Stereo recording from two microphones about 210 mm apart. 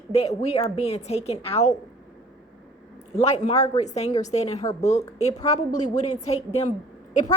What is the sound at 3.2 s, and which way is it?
A woman's voice, 30° left (ahead or behind).